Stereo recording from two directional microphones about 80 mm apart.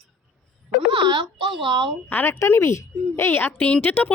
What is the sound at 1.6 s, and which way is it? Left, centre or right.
Speech, right.